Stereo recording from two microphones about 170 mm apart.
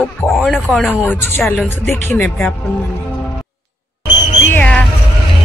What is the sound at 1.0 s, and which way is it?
Speech, 10° left (ahead or behind).